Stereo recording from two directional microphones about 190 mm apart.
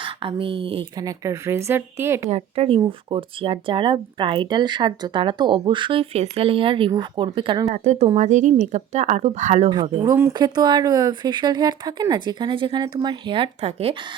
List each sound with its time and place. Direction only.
0.0 s speech: 25° right (ahead or behind)
2.3 s speech: 30° right (ahead or behind)
7.7 s speech: 35° right (ahead or behind)
9.6 s speech: 25° right (ahead or behind)